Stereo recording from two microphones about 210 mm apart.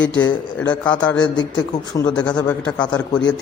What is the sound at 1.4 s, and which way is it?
Speech, 20° left (ahead or behind).